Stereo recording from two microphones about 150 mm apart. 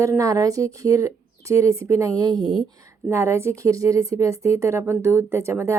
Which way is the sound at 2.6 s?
20° right (ahead or behind).